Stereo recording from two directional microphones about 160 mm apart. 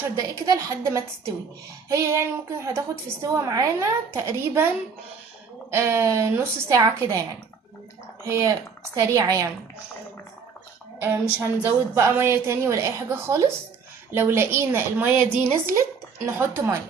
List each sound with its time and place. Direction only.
0.4 s a woman's voice: 20° right (ahead or behind)
5.7 s a woman's voice: 15° right (ahead or behind)
11.0 s a woman's voice: 15° right (ahead or behind)